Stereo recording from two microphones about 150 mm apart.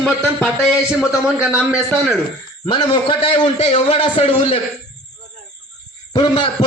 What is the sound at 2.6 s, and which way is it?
A man's voice, 30° left (ahead or behind).